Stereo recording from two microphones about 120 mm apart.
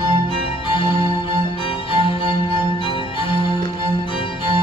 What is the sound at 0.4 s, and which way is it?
Music, 50° left (ahead or behind).